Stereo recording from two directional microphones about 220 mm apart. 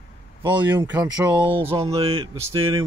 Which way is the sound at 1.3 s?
25° right (ahead or behind).